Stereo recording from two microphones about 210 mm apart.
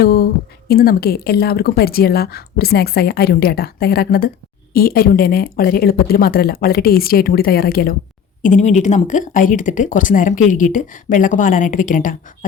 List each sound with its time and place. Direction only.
0.0 s a sound: 45° left (ahead or behind)
0.7 s a woman's voice: 45° left (ahead or behind)
8.4 s speech: 35° left (ahead or behind)